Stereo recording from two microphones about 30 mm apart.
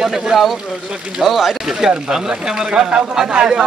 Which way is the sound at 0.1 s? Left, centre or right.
Centre.